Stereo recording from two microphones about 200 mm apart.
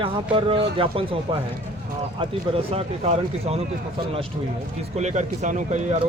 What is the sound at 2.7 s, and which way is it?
Speech, 30° right (ahead or behind).